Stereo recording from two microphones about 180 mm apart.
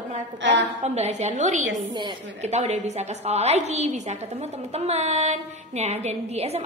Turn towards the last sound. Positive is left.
turn(degrees=-35)  # may be behind; listen again after turning